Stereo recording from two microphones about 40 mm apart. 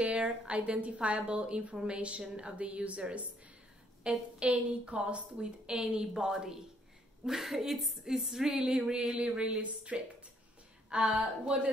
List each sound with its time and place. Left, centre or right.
0.0 s a woman's voice: right; by 8.1 s centre
8.1 s music: centre
8.5 s a woman's voice: right
9.6 s a woman's voice: right